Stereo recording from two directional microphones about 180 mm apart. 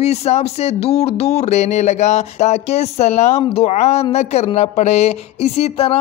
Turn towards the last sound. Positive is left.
turn(degrees=35)  # may be behind; listen again after turning